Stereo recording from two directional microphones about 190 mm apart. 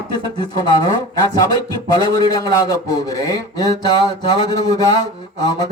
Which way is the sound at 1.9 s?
20° left (ahead or behind).